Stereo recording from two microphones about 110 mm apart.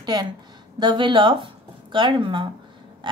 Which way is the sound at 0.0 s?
40° right (ahead or behind).